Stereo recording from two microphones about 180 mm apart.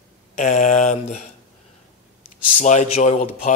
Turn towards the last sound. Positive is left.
turn(degrees=40)  # may be behind; listen again after turning